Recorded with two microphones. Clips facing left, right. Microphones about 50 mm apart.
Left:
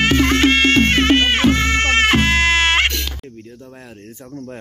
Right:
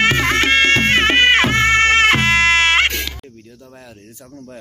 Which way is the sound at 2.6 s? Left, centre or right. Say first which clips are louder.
Right 1 dB; centre.